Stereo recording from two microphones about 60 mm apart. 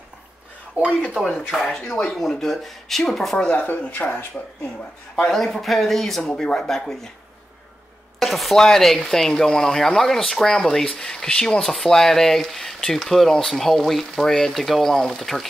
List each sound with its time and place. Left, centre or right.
0.8 s speech: right
1.5 s speech: centre
3.4 s speech: left
5.1 s speech: centre
5.4 s speech: centre
8.2 s speech: centre
11.6 s speech: centre